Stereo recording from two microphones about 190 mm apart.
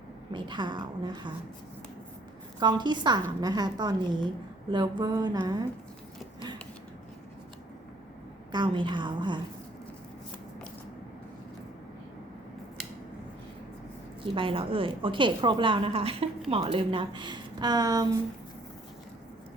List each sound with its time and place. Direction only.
0.3 s a woman's voice: 25° right (ahead or behind)
2.6 s a woman's voice: 25° right (ahead or behind)
8.5 s a woman's voice: 25° right (ahead or behind)
14.3 s a woman's voice: 30° right (ahead or behind)